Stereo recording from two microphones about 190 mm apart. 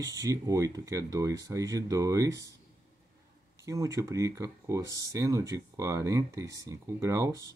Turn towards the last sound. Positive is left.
turn(degrees=-20)  # may be behind; listen again after turning